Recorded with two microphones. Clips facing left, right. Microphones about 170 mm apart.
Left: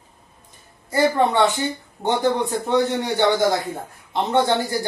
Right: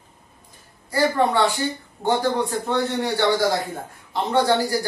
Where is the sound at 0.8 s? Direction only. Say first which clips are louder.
Left 2 dB; 20° left (ahead or behind).